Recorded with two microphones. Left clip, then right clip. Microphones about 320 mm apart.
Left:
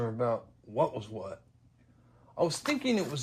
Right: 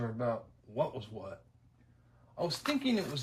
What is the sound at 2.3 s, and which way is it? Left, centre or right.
Speech, left.